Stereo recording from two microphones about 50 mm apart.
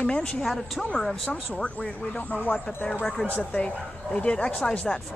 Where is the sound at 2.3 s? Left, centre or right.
Left.